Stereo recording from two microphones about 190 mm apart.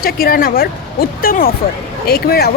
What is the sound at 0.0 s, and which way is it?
Speech, 50° left (ahead or behind).